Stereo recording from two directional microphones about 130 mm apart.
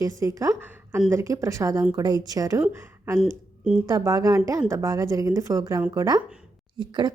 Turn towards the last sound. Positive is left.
turn(degrees=-35)  # may be behind; listen again after turning